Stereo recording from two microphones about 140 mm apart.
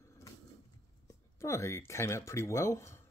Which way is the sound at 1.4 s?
20° left (ahead or behind).